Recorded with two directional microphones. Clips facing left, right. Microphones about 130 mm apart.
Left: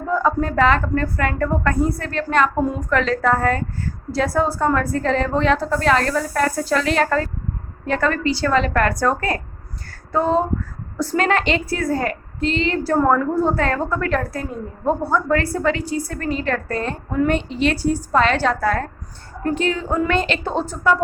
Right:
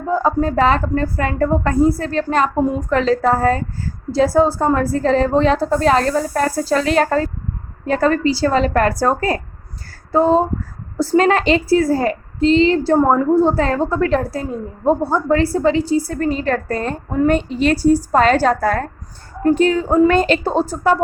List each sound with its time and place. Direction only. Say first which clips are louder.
0.1 s a woman's voice: right 3 dB; 30° right (ahead or behind)
9.9 s a sound: right 5 dB; 30° right (ahead or behind)
10.9 s a woman's voice: right 5 dB; 30° right (ahead or behind)